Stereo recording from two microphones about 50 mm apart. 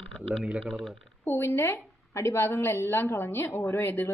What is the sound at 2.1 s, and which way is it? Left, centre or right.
A woman's voice, left.